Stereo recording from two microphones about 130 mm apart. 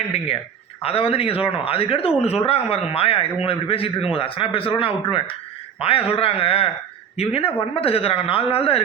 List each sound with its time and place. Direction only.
0.8 s a man's voice: 45° left (ahead or behind)